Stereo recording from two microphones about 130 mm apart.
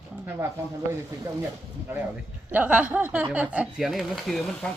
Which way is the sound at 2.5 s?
10° right (ahead or behind).